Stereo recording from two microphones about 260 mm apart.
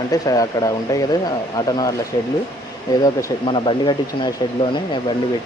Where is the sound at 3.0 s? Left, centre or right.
Centre.